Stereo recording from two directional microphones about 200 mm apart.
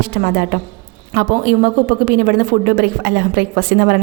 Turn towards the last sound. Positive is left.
turn(degrees=-50)  # may be behind; listen again after turning